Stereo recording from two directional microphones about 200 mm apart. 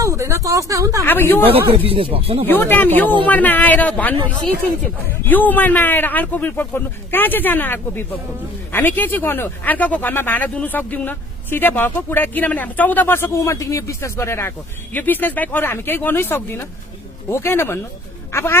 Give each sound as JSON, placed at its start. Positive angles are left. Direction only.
{"t": 0.0, "sound": "speech", "side_deg": -15}
{"t": 1.0, "sound": "speech", "side_deg": 10}
{"t": 1.9, "sound": "speech", "side_deg": -25}
{"t": 2.4, "sound": "speech", "side_deg": 10}